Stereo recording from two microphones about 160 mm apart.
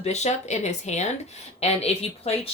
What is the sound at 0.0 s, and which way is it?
Speech, 45° left (ahead or behind).